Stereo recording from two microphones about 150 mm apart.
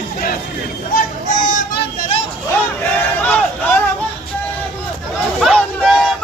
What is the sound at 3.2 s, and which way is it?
Speech, 10° left (ahead or behind).